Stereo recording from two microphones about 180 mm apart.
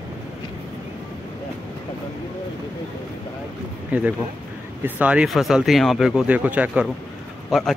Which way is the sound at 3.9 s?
10° right (ahead or behind).